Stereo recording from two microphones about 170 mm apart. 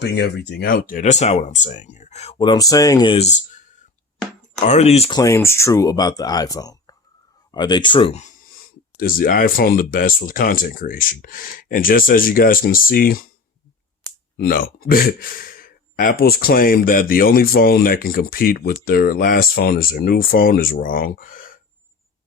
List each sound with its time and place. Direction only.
0.0 s speech: 90° left; by 3.2 s 25° left (ahead or behind)
4.6 s speech: 40° left (ahead or behind)
5.1 s speech: 15° left (ahead or behind)
9.0 s speech: 55° left (ahead or behind)
14.3 s speech: 60° left (ahead or behind)